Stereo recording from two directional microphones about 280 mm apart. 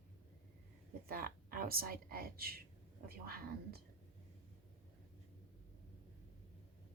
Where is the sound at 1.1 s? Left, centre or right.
Right.